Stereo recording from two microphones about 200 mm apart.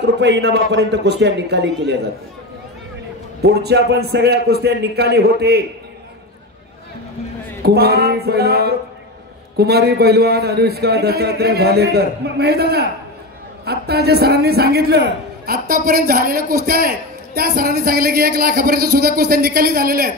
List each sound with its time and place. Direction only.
0.0 s a man's voice: 60° right (ahead or behind)
3.4 s a man's voice: 55° right (ahead or behind)
7.6 s a man's voice: 50° right (ahead or behind)